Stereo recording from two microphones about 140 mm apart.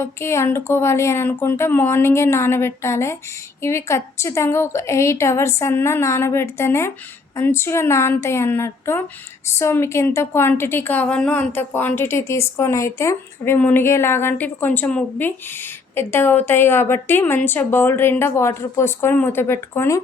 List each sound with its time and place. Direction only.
0.0 s a woman's voice: 20° left (ahead or behind)